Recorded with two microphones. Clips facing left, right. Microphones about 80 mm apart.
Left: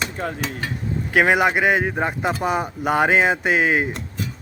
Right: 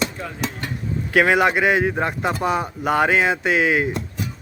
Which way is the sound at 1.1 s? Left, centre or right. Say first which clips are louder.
Right 1 dB; centre.